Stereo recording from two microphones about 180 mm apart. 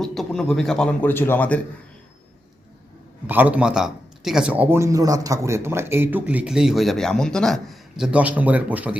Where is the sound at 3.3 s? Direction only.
10° right (ahead or behind).